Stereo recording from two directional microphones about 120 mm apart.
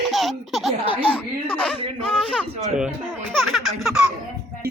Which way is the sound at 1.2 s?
15° left (ahead or behind).